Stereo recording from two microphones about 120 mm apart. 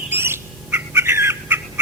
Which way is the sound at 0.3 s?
20° right (ahead or behind).